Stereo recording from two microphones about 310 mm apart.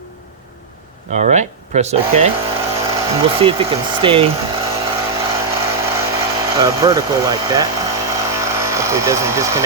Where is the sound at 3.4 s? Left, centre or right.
Centre.